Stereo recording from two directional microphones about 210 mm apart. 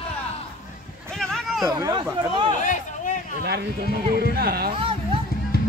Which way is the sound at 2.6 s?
35° left (ahead or behind).